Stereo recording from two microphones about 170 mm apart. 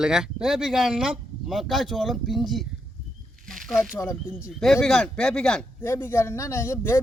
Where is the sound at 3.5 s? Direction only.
Centre (ahead or behind).